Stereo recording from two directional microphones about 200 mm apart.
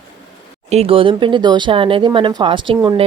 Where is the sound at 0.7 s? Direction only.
30° right (ahead or behind).